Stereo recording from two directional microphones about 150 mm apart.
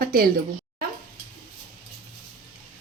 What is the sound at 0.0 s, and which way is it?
Speech, 85° right.